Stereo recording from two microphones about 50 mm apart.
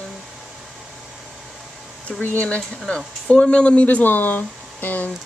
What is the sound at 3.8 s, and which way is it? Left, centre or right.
Speech, left.